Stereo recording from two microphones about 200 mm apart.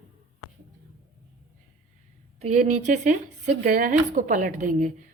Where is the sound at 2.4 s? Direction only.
40° right (ahead or behind).